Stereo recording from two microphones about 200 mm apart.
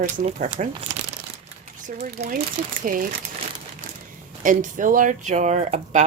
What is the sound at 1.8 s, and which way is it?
Speech, 40° right (ahead or behind).